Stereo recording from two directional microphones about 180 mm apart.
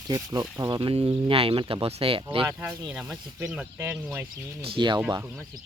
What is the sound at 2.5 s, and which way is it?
Speech, 5° right (ahead or behind).